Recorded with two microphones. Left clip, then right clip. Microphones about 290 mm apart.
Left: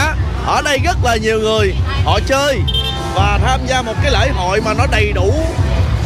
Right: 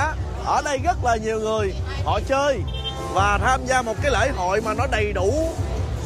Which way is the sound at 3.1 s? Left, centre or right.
Centre.